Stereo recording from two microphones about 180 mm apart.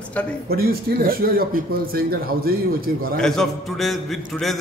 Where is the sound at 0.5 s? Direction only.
55° right (ahead or behind).